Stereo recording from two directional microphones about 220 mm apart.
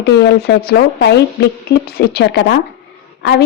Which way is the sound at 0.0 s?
50° left (ahead or behind).